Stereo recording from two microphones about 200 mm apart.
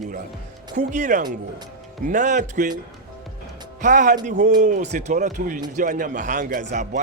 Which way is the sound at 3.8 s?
40° right (ahead or behind).